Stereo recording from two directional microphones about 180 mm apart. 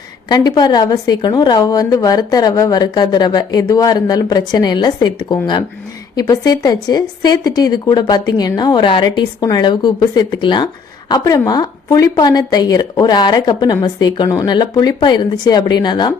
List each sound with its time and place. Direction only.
0.3 s a woman's voice: 25° left (ahead or behind)